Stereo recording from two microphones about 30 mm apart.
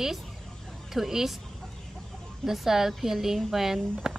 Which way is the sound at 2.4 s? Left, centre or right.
Centre.